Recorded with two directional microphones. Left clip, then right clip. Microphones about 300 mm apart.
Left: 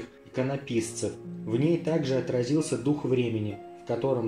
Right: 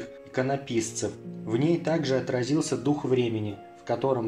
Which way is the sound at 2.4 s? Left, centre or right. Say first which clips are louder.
Even; right.